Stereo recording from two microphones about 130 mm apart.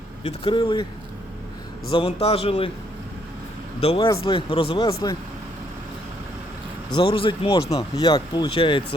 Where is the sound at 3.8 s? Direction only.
45° left (ahead or behind).